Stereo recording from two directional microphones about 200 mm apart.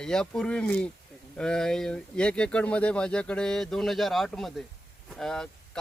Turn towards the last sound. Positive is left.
turn(degrees=5)  # may be behind; listen again after turning